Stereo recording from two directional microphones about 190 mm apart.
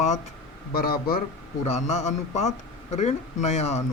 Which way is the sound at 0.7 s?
50° left (ahead or behind).